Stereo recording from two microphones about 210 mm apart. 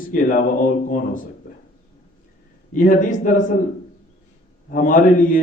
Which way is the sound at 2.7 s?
40° left (ahead or behind).